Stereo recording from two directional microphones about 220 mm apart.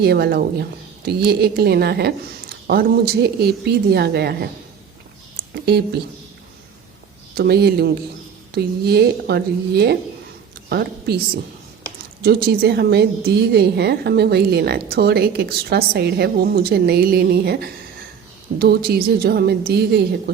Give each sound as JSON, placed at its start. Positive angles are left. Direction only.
{"t": 0.0, "sound": "a woman's voice", "side_deg": -45}
{"t": 5.6, "sound": "a woman's voice", "side_deg": -45}
{"t": 7.3, "sound": "a woman's voice", "side_deg": -45}
{"t": 12.2, "sound": "a woman's voice", "side_deg": -45}